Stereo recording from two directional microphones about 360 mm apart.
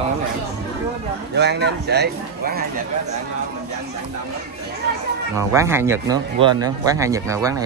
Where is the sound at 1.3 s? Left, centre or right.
Right.